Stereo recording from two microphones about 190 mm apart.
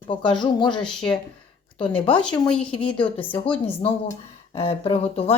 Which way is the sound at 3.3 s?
30° left (ahead or behind).